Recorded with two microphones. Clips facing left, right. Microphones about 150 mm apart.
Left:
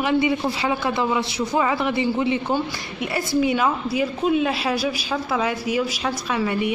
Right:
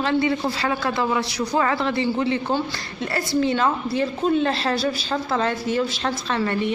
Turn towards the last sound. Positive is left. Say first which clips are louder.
# even
turn(degrees=10)  # may be behind; listen again after turning